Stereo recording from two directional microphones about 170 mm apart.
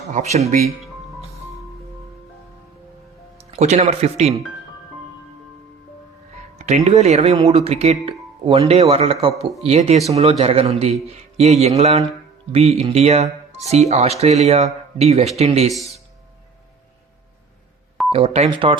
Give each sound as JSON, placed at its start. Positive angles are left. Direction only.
{"t": 3.5, "sound": "speech", "side_deg": -40}
{"t": 6.6, "sound": "speech", "side_deg": -40}
{"t": 18.1, "sound": "speech", "side_deg": -35}